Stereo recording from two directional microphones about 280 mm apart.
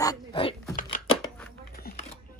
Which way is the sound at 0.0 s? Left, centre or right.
Centre.